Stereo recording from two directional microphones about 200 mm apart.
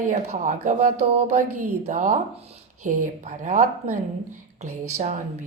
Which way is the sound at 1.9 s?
40° right (ahead or behind).